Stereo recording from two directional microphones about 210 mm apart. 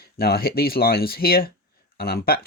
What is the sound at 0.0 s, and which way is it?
Speech, 45° left (ahead or behind).